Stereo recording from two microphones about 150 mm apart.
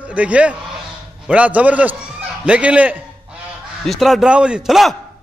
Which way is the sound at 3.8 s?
Centre (ahead or behind).